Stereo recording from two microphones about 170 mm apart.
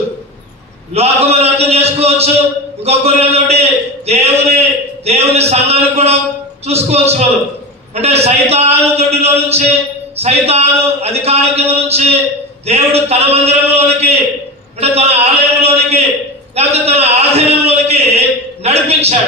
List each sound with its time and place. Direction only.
0.9 s a man's voice: 40° right (ahead or behind)